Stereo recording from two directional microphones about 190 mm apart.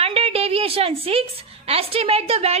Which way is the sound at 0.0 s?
30° right (ahead or behind).